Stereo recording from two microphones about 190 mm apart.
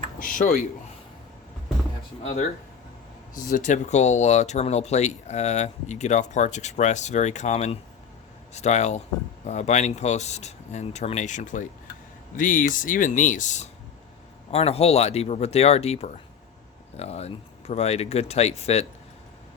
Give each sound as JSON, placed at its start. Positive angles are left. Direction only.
{"t": 0.2, "sound": "speech", "side_deg": 45}
{"t": 3.3, "sound": "speech", "side_deg": 40}